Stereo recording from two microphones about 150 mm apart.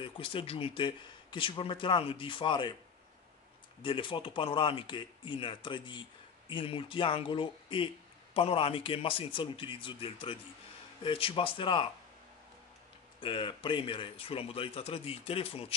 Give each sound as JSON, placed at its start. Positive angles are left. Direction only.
{"t": 0.0, "sound": "speech", "side_deg": 35}
{"t": 3.8, "sound": "speech", "side_deg": 35}
{"t": 13.2, "sound": "speech", "side_deg": 35}